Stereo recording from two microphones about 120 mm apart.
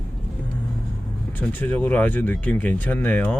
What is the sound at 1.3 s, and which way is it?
Speech, 15° left (ahead or behind).